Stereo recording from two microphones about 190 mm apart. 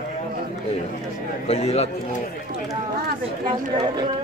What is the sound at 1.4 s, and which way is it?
Speech, 35° left (ahead or behind).